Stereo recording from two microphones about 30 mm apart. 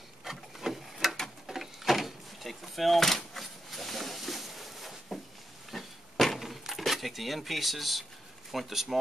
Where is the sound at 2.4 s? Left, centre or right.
Centre.